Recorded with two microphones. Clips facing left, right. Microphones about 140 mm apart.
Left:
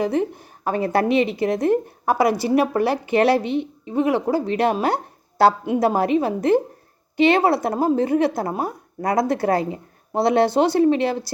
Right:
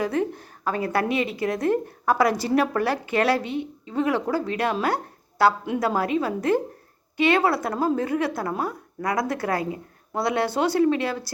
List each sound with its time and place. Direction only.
0.0 s a woman's voice: 20° left (ahead or behind)